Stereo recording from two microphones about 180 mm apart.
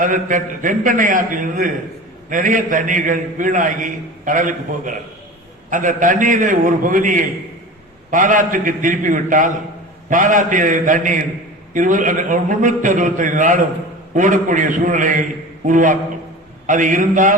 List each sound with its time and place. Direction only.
0.0 s a man's voice: 45° right (ahead or behind)